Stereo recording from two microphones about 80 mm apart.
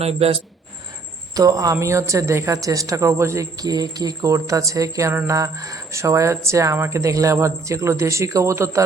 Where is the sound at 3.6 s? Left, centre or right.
Right.